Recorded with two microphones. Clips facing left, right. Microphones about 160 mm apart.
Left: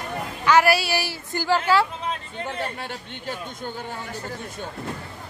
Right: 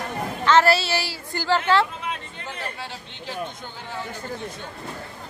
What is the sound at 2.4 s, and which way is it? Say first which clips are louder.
Speech: left 5 dB; 55° left (ahead or behind).